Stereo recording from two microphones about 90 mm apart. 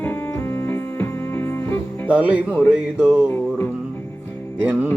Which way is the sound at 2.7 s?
10° right (ahead or behind).